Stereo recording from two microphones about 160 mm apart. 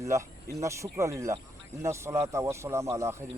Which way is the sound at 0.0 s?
20° right (ahead or behind).